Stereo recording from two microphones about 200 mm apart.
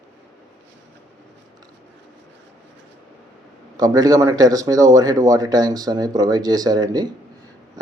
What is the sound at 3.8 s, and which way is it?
Speech, 20° right (ahead or behind).